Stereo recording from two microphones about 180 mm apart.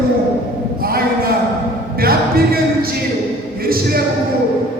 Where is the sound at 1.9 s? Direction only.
55° right (ahead or behind).